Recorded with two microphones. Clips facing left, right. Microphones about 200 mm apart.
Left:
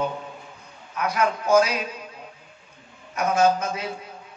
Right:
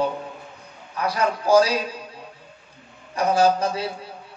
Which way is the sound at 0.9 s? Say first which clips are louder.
Even; 35° right (ahead or behind).